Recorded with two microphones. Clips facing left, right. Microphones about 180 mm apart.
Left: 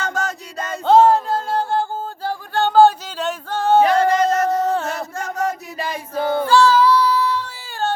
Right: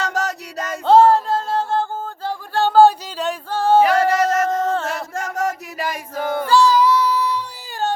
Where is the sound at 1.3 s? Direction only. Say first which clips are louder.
Even; 25° right (ahead or behind).